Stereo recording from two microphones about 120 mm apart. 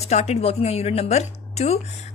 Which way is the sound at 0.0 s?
60° left (ahead or behind).